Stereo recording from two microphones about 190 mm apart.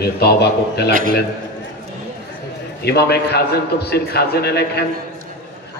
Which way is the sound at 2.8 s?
60° left (ahead or behind).